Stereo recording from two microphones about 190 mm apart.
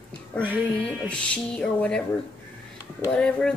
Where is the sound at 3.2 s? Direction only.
5° left (ahead or behind).